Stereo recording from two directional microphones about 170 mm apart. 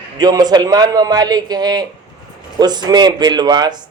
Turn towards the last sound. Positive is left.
turn(degrees=-25)  # may be behind; listen again after turning